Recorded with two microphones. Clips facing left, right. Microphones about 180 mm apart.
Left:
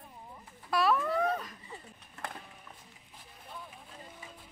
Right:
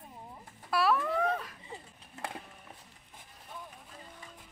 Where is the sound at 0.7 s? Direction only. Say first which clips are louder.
Even; 5° right (ahead or behind).